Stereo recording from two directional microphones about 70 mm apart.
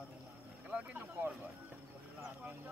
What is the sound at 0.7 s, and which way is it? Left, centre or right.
Speech, centre.